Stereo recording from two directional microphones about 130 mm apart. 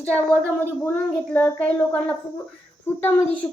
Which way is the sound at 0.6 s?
15° left (ahead or behind).